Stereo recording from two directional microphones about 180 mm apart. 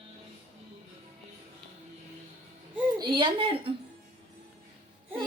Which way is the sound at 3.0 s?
25° right (ahead or behind).